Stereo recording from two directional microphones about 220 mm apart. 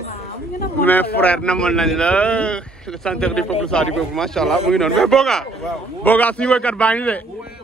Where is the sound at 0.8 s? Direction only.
10° left (ahead or behind).